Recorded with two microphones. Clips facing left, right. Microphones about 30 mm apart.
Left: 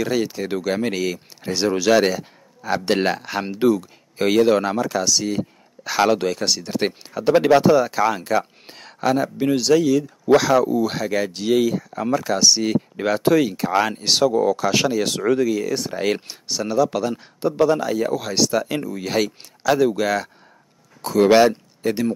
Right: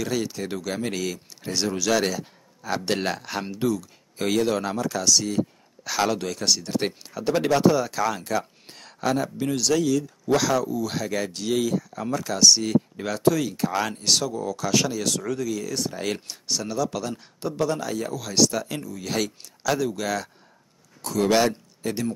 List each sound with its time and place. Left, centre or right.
0.0 s speech: centre
19.0 s speech: centre